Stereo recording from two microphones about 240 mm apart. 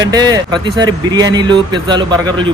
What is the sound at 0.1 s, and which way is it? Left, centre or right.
Speech, centre.